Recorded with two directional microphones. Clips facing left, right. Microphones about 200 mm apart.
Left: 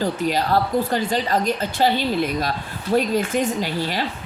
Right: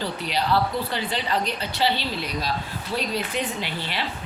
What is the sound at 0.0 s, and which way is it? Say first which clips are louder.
Speech: left 5 dB; 45° left (ahead or behind).